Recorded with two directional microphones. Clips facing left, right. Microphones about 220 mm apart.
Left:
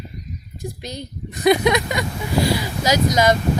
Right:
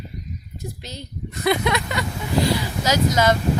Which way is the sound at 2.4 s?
10° left (ahead or behind).